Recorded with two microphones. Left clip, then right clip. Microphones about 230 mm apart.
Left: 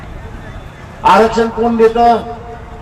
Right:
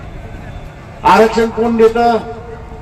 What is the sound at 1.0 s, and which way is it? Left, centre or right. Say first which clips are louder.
A man's voice: even; right.